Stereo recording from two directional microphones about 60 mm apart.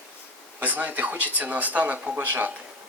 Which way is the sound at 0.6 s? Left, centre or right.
Right.